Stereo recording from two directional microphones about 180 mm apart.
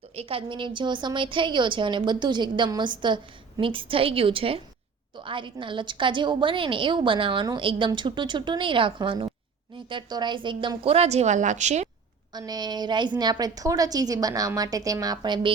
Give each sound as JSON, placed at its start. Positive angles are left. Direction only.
{"t": 0.2, "sound": "a woman's voice", "side_deg": -30}
{"t": 12.3, "sound": "a woman's voice", "side_deg": -20}